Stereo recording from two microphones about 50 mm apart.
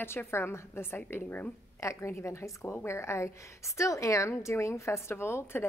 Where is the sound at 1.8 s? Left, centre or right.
Left.